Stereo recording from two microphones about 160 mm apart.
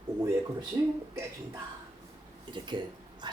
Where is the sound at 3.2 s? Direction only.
30° right (ahead or behind).